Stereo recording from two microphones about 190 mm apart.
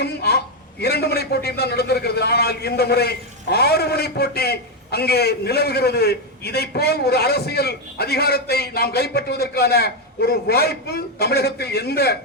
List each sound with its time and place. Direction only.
0.0 s a man's voice: 55° left (ahead or behind)